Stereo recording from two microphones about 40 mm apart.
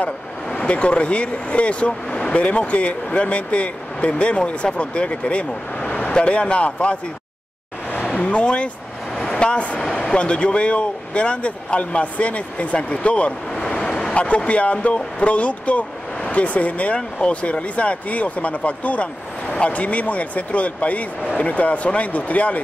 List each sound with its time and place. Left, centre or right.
0.6 s speech: left
8.2 s speech: left
13.7 s vehicle: centre
14.1 s speech: left